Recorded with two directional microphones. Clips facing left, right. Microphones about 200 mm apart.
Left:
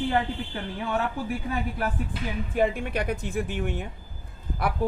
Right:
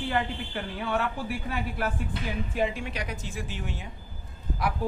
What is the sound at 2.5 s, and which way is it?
A woman's voice, 55° left (ahead or behind).